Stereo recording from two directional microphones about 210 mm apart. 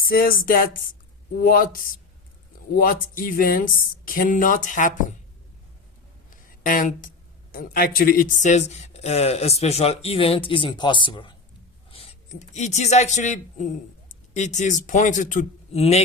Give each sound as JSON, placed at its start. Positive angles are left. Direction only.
{"t": 0.0, "sound": "speech", "side_deg": 45}
{"t": 6.3, "sound": "a sound", "side_deg": 40}
{"t": 7.5, "sound": "speech", "side_deg": 45}